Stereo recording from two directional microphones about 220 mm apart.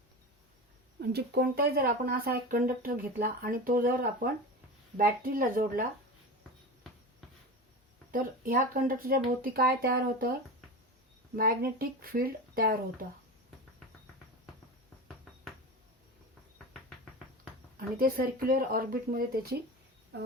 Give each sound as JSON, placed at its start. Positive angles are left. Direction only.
{"t": 1.0, "sound": "speech", "side_deg": -45}
{"t": 8.1, "sound": "speech", "side_deg": -40}
{"t": 11.3, "sound": "speech", "side_deg": -40}
{"t": 17.7, "sound": "speech", "side_deg": -40}